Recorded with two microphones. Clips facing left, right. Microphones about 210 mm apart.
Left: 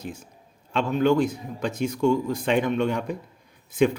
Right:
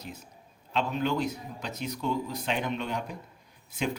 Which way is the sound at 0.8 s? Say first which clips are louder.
Left 8 dB; 50° left (ahead or behind).